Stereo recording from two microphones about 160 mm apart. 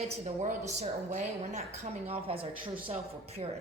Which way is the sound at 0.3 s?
45° right (ahead or behind).